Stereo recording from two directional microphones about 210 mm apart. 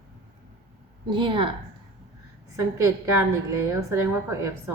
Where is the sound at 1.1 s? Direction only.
25° right (ahead or behind).